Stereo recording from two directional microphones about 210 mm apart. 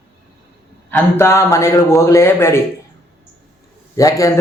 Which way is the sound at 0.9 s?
10° left (ahead or behind).